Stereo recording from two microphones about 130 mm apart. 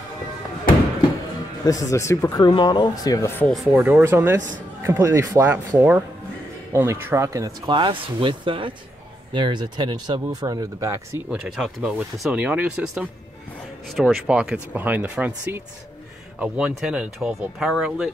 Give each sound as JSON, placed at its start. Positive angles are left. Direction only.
{"t": 1.7, "sound": "speech", "side_deg": 25}
{"t": 2.3, "sound": "speech", "side_deg": 35}
{"t": 3.3, "sound": "speech", "side_deg": 15}
{"t": 3.7, "sound": "speech", "side_deg": -15}
{"t": 7.7, "sound": "speech", "side_deg": -40}
{"t": 11.2, "sound": "speech", "side_deg": -5}